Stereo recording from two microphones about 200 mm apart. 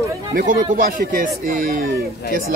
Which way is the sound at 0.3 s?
45° right (ahead or behind).